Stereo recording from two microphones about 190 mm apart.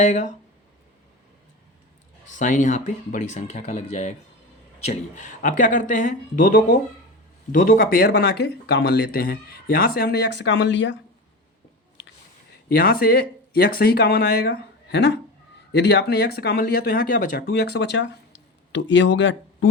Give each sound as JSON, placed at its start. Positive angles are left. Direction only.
{"t": 0.0, "sound": "speech", "side_deg": 40}
{"t": 2.2, "sound": "speech", "side_deg": 40}
{"t": 12.7, "sound": "speech", "side_deg": 50}